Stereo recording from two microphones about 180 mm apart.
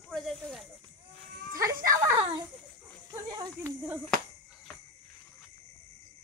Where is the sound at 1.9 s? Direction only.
20° right (ahead or behind).